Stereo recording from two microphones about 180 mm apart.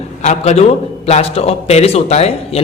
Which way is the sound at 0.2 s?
40° left (ahead or behind).